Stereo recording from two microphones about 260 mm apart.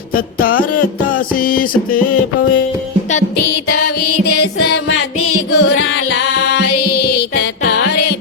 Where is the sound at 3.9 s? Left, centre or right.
Left.